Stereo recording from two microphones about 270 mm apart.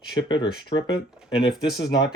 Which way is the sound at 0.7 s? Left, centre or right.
Centre.